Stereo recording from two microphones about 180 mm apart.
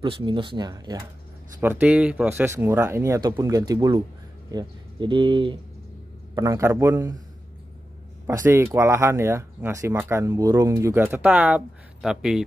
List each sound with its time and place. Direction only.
0.0 s speech: 25° right (ahead or behind)
1.6 s speech: 10° right (ahead or behind)
8.3 s speech: 15° right (ahead or behind)